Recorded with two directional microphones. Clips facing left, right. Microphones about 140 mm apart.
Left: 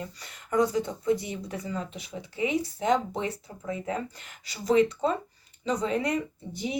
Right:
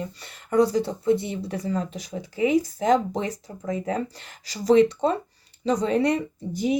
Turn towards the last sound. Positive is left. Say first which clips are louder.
# right 3 dB
turn(degrees=-35)  # may be behind; listen again after turning